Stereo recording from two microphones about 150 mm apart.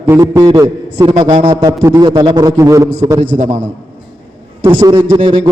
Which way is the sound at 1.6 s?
20° right (ahead or behind).